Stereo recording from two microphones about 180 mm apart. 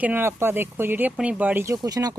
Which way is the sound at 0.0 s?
10° right (ahead or behind).